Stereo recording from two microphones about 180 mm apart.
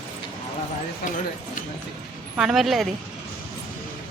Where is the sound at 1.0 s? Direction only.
55° left (ahead or behind).